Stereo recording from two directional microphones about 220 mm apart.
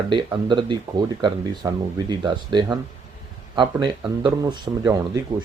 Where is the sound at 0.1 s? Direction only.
20° right (ahead or behind).